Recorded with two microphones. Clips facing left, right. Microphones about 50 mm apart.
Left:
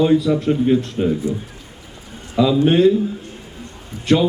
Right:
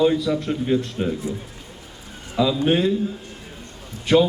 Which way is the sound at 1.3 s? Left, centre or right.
Right.